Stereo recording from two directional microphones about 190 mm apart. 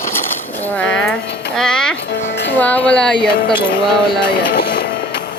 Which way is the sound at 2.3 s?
65° left (ahead or behind).